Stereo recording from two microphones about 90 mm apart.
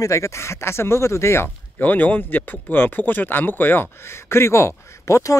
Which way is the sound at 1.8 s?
20° left (ahead or behind).